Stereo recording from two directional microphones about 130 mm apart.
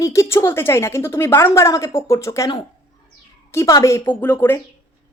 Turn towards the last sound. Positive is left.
turn(degrees=20)  # may be behind; listen again after turning